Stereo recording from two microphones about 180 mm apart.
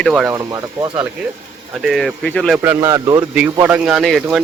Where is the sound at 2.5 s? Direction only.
15° right (ahead or behind).